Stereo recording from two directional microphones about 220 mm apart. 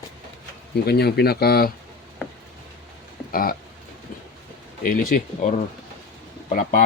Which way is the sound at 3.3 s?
40° left (ahead or behind).